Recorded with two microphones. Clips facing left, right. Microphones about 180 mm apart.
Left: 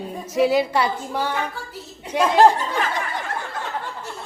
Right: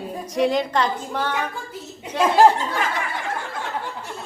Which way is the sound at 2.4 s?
15° left (ahead or behind).